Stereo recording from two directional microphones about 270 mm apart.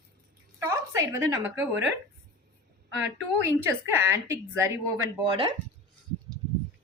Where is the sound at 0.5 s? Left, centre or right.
Centre.